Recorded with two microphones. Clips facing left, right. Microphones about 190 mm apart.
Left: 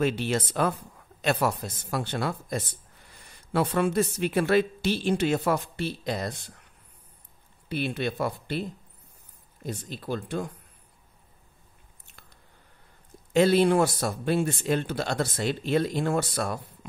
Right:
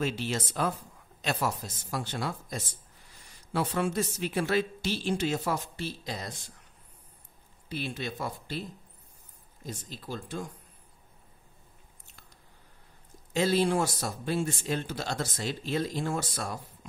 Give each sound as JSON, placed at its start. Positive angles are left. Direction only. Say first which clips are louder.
{"t": 0.0, "sound": "speech", "louder": "left 5 dB", "side_deg": 60}
{"t": 7.6, "sound": "speech", "louder": "left 6 dB", "side_deg": 60}
{"t": 13.3, "sound": "speech", "louder": "left 6 dB", "side_deg": 60}